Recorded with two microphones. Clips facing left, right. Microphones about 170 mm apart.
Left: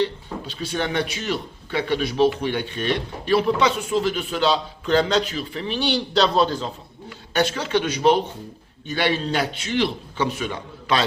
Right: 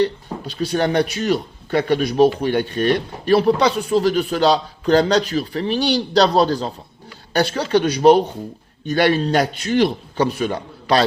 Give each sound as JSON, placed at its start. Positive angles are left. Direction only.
{"t": 0.0, "sound": "speech", "side_deg": -40}